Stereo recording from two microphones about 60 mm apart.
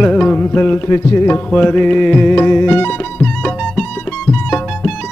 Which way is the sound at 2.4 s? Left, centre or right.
Left.